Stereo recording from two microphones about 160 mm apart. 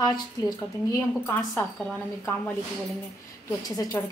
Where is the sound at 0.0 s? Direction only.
25° left (ahead or behind).